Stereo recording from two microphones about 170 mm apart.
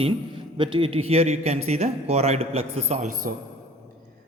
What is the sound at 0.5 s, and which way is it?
A man's voice, 30° right (ahead or behind).